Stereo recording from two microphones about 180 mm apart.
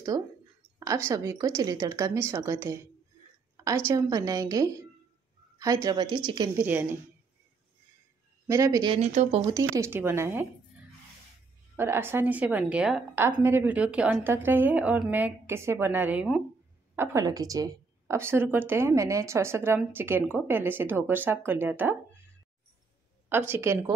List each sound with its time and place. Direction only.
0.1 s a woman's voice: 20° right (ahead or behind)
6.5 s a woman's voice: 10° right (ahead or behind)
8.5 s a woman's voice: 20° right (ahead or behind)
8.9 s speech: 40° right (ahead or behind)
9.5 s a woman's voice: 15° right (ahead or behind)
11.7 s a woman's voice: 10° right (ahead or behind)
23.2 s a woman's voice: 10° right (ahead or behind)